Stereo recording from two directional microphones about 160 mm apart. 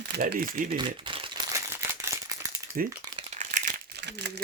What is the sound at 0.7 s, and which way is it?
Speech, 30° right (ahead or behind).